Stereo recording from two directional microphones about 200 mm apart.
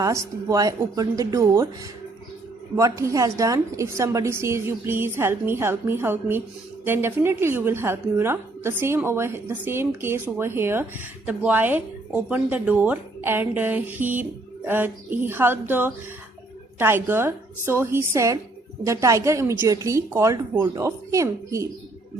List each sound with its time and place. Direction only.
0.0 s speech: 15° right (ahead or behind)
2.7 s speech: 15° right (ahead or behind)